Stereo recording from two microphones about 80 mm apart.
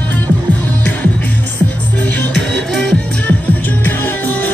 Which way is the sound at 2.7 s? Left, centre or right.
Centre.